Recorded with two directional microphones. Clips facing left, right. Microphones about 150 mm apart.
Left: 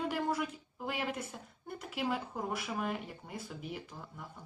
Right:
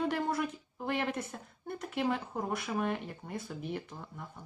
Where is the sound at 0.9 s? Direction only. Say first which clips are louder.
Right 4 dB; 10° left (ahead or behind).